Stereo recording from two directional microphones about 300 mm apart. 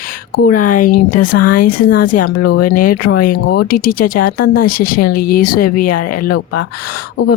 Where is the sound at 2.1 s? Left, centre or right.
Left.